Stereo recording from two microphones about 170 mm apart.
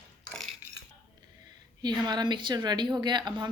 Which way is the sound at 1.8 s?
25° right (ahead or behind).